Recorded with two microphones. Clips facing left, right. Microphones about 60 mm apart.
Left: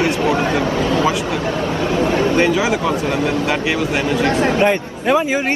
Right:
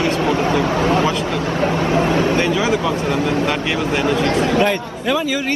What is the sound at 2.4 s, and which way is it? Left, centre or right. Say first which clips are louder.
A man's voice: left 1 dB; left.